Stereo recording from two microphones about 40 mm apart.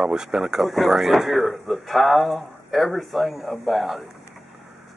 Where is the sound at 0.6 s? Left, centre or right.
Centre.